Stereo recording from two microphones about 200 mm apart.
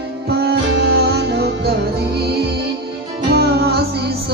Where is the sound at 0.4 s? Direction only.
55° right (ahead or behind).